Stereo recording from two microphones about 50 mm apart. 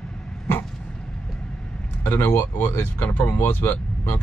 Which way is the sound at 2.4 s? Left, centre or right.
Left.